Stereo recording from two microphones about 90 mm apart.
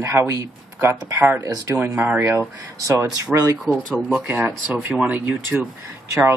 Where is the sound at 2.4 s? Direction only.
35° right (ahead or behind).